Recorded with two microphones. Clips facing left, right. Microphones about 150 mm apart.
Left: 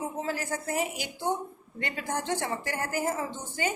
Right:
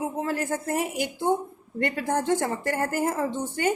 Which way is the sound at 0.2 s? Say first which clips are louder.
Right 5 dB; 55° right (ahead or behind).